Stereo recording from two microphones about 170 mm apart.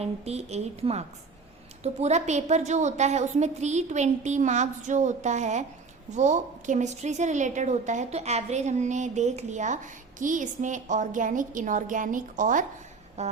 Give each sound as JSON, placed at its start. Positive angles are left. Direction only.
{"t": 0.0, "sound": "a woman's voice", "side_deg": -40}